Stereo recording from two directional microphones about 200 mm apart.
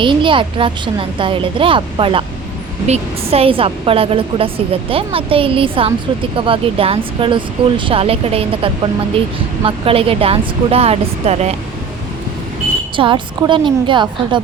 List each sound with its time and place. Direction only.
0.0 s a woman's voice: 25° right (ahead or behind)
13.0 s a woman's voice: 25° right (ahead or behind)